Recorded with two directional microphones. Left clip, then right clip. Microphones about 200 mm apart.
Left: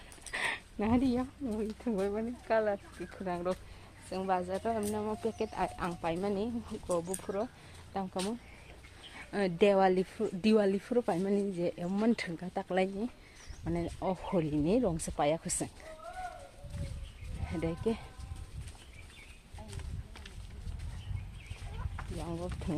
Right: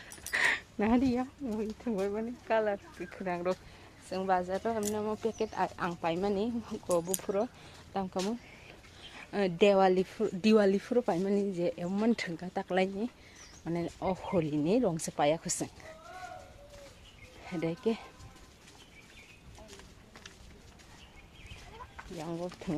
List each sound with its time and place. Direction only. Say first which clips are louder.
0.3 s speech: right 6 dB; 20° right (ahead or behind)
7.2 s speech: right 4 dB; 25° right (ahead or behind)
7.9 s speech: right 2 dB; 15° right (ahead or behind)
17.4 s speech: right 2 dB; 5° right (ahead or behind)
22.2 s speech: right 3 dB; 10° right (ahead or behind)